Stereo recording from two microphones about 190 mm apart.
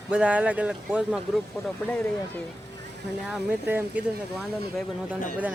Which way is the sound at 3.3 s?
10° right (ahead or behind).